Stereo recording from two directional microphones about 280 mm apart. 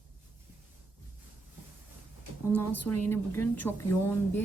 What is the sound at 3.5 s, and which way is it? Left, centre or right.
Speech, centre.